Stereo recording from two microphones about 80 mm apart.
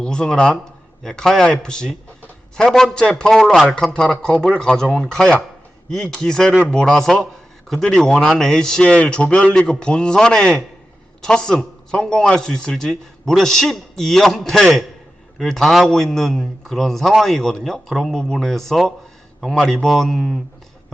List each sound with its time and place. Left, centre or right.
0.0 s a man's voice: centre